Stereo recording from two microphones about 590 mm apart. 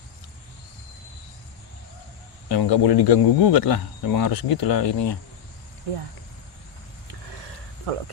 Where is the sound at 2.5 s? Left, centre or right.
Left.